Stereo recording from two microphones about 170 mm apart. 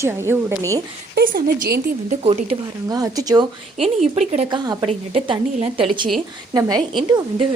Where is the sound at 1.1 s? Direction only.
60° right (ahead or behind).